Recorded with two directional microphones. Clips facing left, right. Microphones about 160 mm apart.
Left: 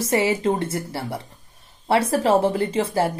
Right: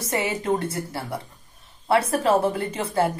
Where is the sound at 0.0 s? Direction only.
30° left (ahead or behind).